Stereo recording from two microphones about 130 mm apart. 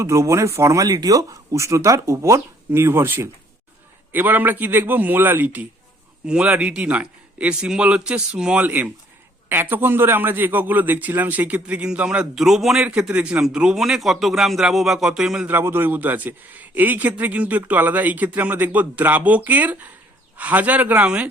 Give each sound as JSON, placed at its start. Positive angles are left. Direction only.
{"t": 0.0, "sound": "a man's voice", "side_deg": -20}